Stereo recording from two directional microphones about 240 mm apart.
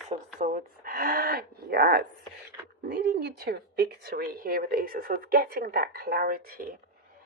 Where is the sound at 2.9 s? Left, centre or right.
Right.